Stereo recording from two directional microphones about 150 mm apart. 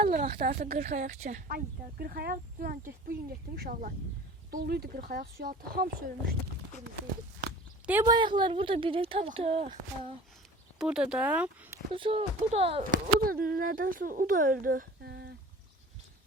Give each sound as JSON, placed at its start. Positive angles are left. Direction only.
{"t": 0.0, "sound": "a sound", "side_deg": -70}
{"t": 0.3, "sound": "speech", "side_deg": -65}
{"t": 4.5, "sound": "speech", "side_deg": -90}
{"t": 8.0, "sound": "speech", "side_deg": -30}
{"t": 10.8, "sound": "speech", "side_deg": -5}
{"t": 11.9, "sound": "speech", "side_deg": -35}
{"t": 12.8, "sound": "speech", "side_deg": -75}